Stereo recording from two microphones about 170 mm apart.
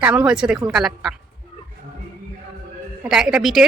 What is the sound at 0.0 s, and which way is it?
Speech, 10° right (ahead or behind).